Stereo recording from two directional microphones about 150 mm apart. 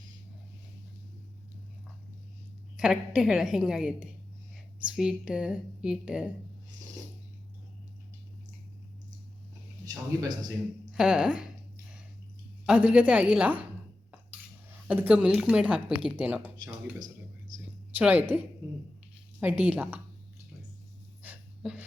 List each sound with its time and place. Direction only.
2.7 s a woman's voice: 5° right (ahead or behind)
9.8 s a man's voice: 25° right (ahead or behind)
10.9 s a woman's voice: 5° right (ahead or behind)
12.6 s a woman's voice: 5° right (ahead or behind)
14.8 s a woman's voice: 10° right (ahead or behind)
15.9 s speech: 35° right (ahead or behind)
16.1 s a woman's voice: 10° right (ahead or behind)
17.9 s a woman's voice: 10° right (ahead or behind)
19.6 s a woman's voice: 10° right (ahead or behind)
21.2 s a sound: 5° right (ahead or behind)